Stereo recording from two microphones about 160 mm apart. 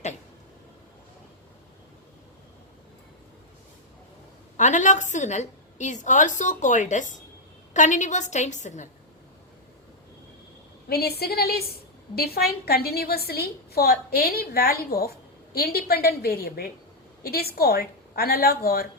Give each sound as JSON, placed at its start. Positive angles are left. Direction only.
{"t": 4.5, "sound": "a woman's voice", "side_deg": 50}
{"t": 10.8, "sound": "a woman's voice", "side_deg": 80}